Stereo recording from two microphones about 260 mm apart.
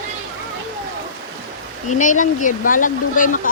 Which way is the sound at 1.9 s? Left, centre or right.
Left.